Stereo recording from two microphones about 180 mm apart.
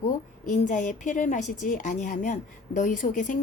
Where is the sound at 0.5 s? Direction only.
45° left (ahead or behind).